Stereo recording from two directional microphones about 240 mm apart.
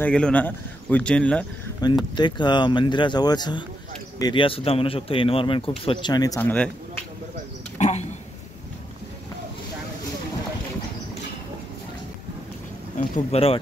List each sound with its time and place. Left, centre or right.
0.0 s a man's voice: centre
2.1 s speech: centre
7.8 s a sound: left
12.9 s speech: left